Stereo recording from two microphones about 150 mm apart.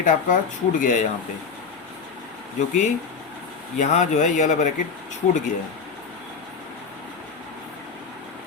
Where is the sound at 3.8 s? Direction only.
50° left (ahead or behind).